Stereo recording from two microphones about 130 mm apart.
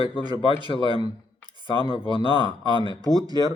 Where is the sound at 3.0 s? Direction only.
30° right (ahead or behind).